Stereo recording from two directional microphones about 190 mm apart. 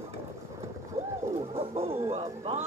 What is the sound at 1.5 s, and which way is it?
Bird, 30° right (ahead or behind).